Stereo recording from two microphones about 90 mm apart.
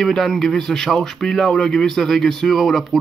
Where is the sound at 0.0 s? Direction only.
5° left (ahead or behind).